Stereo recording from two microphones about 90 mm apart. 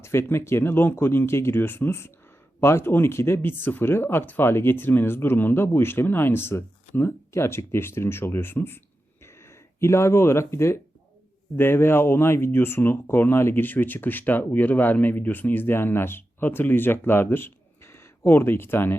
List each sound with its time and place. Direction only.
0.0 s speech: 30° left (ahead or behind)